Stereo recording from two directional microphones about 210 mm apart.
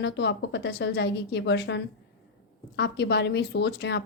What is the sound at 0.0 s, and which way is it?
A woman's voice, 55° left (ahead or behind).